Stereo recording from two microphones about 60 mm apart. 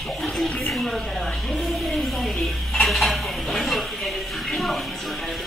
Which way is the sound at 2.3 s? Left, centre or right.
Centre.